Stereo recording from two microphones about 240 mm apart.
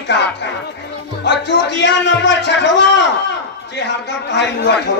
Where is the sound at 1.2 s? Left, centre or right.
Left.